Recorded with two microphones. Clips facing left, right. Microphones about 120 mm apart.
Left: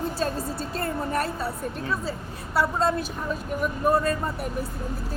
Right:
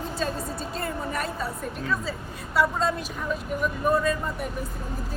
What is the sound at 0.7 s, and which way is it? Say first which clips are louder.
Speech: left 4 dB; 45° left (ahead or behind).